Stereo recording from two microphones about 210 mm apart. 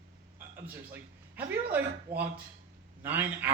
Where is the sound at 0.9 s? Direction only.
10° right (ahead or behind).